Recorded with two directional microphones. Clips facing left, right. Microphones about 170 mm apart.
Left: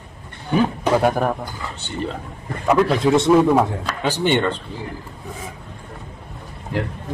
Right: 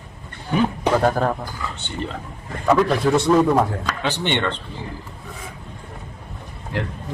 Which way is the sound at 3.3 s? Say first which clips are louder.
Left 1 dB; 5° left (ahead or behind).